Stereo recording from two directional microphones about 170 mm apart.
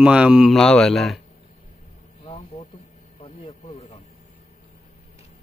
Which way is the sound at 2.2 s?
35° left (ahead or behind).